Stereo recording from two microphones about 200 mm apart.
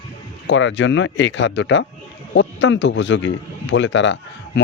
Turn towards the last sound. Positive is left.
turn(degrees=65)  # may be behind; listen again after turning